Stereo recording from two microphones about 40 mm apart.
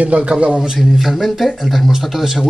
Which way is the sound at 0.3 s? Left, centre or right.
Right.